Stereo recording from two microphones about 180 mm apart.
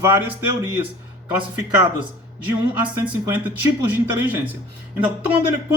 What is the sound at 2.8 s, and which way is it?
Speech, 10° right (ahead or behind).